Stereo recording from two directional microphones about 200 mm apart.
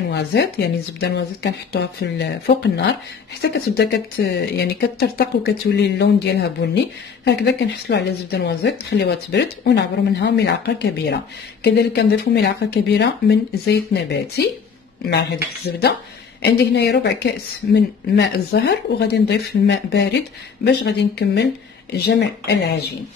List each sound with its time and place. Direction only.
0.1 s speech: 55° left (ahead or behind)
15.7 s speech: 55° left (ahead or behind)